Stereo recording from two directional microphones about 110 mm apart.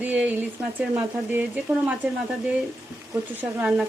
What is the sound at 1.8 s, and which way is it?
Stir, 15° right (ahead or behind).